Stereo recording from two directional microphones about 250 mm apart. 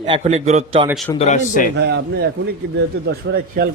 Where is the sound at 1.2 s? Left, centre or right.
Left.